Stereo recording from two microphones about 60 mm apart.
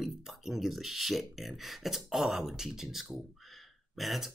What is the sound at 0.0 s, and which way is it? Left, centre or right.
Speech, centre.